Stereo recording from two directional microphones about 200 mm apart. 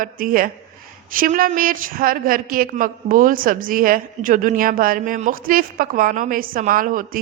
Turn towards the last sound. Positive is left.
turn(degrees=-45)  # may be behind; listen again after turning